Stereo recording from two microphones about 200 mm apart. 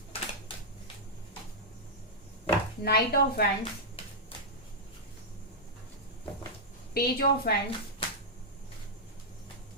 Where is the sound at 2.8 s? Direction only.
50° left (ahead or behind).